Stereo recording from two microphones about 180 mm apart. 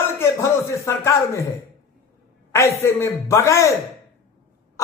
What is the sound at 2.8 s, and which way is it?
Speech, 15° left (ahead or behind).